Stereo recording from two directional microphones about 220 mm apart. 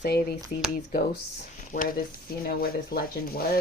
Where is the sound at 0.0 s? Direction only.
45° left (ahead or behind).